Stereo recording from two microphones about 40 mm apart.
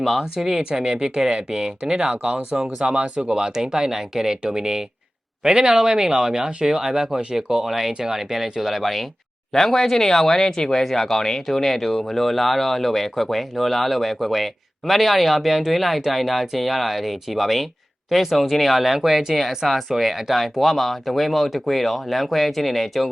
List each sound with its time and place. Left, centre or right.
0.0 s speech: centre
0.6 s speech: right; by 23.0 s centre